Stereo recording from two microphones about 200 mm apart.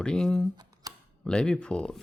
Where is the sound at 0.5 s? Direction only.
20° right (ahead or behind).